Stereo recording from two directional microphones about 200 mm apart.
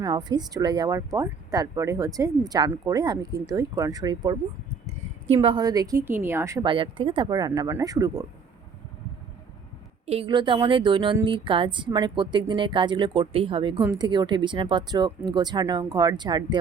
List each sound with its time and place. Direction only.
0.0 s a woman's voice: 20° right (ahead or behind)
10.1 s a woman's voice: 25° right (ahead or behind)